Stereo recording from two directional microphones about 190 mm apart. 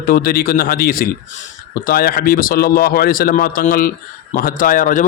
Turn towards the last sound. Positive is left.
turn(degrees=45)  # may be behind; listen again after turning